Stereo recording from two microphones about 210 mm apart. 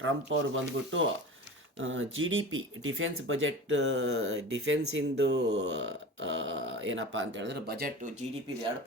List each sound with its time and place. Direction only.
0.0 s speech: 65° right (ahead or behind); by 8.1 s 45° right (ahead or behind)